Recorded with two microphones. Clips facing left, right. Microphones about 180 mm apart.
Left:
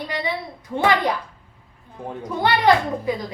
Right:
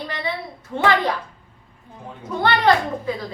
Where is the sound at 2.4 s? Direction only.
15° left (ahead or behind).